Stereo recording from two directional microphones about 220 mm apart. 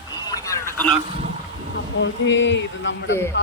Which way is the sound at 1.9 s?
55° left (ahead or behind).